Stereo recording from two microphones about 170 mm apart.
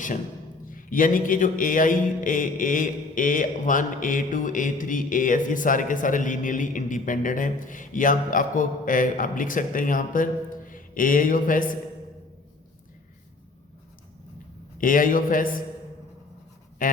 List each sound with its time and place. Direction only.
0.7 s mantra: 55° left (ahead or behind)
14.8 s mantra: 55° left (ahead or behind)
16.8 s a sound: 55° left (ahead or behind)